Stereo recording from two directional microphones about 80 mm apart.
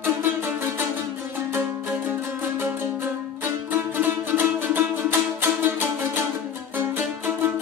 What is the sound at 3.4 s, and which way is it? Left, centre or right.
Music, right.